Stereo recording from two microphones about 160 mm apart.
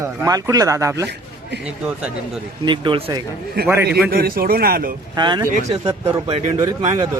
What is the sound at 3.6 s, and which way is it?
A man's voice, 75° right (ahead or behind).